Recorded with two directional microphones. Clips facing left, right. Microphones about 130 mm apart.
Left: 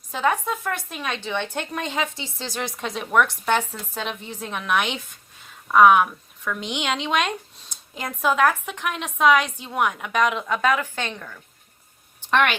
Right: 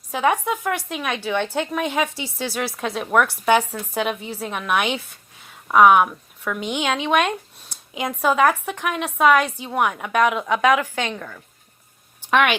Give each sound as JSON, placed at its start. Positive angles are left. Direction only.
{"t": 0.1, "sound": "speech", "side_deg": -15}
{"t": 7.1, "sound": "speech", "side_deg": -55}
{"t": 7.7, "sound": "speech", "side_deg": -10}
{"t": 12.3, "sound": "speech", "side_deg": -10}